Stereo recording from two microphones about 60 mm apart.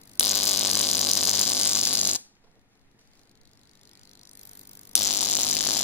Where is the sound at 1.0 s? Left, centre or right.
Centre.